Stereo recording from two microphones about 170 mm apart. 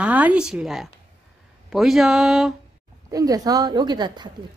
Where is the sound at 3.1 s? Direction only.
20° right (ahead or behind).